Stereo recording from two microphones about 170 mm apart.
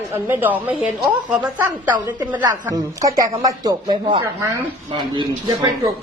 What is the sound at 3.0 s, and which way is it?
A woman's voice, 20° right (ahead or behind).